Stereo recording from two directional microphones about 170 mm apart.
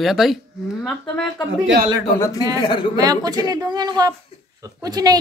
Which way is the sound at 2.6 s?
30° left (ahead or behind).